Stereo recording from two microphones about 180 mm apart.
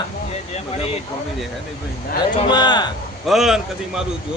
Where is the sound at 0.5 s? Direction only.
35° left (ahead or behind).